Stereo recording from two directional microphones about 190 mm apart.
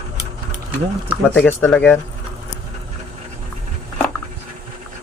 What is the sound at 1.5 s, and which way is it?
Speech, 10° left (ahead or behind).